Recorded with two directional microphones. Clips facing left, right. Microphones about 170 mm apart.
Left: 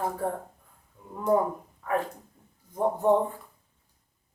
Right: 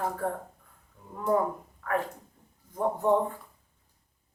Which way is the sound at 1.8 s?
15° left (ahead or behind).